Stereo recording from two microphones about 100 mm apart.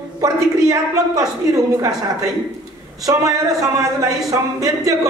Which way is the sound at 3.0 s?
35° right (ahead or behind).